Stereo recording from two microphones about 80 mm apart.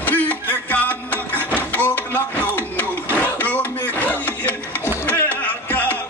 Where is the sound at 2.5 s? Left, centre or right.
Left.